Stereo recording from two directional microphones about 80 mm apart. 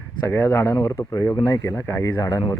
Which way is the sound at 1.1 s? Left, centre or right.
Left.